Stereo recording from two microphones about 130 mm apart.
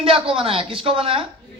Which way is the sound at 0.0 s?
45° right (ahead or behind).